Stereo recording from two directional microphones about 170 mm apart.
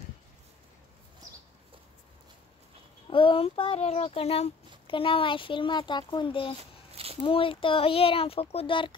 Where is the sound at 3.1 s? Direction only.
30° left (ahead or behind).